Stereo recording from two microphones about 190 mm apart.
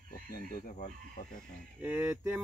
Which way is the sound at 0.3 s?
55° left (ahead or behind).